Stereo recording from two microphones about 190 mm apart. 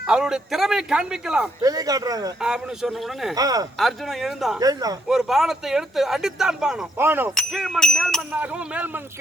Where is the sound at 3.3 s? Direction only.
20° right (ahead or behind).